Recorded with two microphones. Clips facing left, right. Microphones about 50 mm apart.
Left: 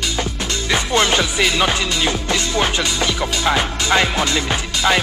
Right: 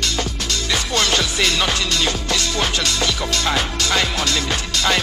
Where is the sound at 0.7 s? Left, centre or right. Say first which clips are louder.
Left 4 dB; left.